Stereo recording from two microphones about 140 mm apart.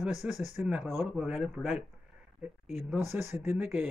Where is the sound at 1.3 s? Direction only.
Centre (ahead or behind).